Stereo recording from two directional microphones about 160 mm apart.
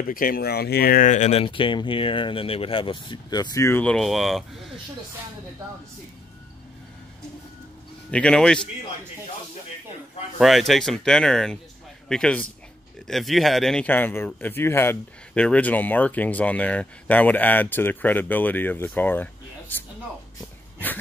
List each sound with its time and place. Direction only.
0.1 s speech: 65° left (ahead or behind); by 3.8 s 20° left (ahead or behind)
3.8 s speech: centre (ahead or behind)
8.1 s speech: 5° left (ahead or behind)
10.4 s a man's voice: centre (ahead or behind)